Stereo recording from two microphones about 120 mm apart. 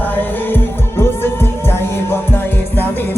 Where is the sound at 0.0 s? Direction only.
15° left (ahead or behind).